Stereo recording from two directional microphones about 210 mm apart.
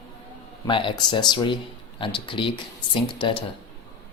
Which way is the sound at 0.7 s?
25° left (ahead or behind).